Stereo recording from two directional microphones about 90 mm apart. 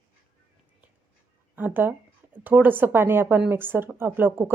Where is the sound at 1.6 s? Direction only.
20° right (ahead or behind).